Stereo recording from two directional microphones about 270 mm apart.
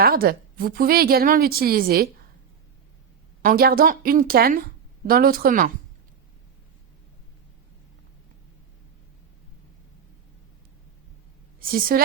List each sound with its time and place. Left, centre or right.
0.0 s a woman's voice: right
3.4 s a woman's voice: right
11.6 s a woman's voice: right